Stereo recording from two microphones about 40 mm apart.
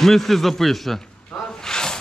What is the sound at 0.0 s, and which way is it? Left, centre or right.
A man's voice, centre.